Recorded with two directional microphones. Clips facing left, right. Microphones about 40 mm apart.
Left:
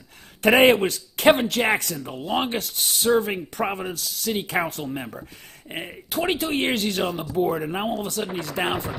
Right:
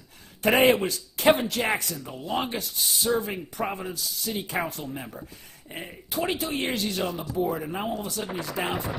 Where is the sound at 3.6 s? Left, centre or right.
Left.